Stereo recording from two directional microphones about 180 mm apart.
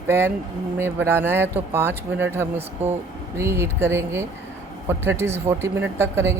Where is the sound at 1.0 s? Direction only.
10° right (ahead or behind).